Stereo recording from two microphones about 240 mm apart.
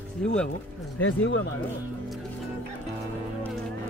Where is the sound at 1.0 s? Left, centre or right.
Left.